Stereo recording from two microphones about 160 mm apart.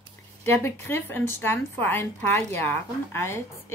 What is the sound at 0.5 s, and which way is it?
A woman's voice, 15° left (ahead or behind).